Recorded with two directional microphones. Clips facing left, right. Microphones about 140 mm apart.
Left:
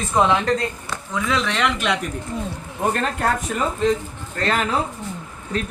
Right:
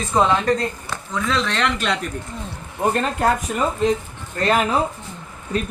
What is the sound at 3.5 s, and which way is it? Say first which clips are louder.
Speech: right 1 dB; 20° right (ahead or behind).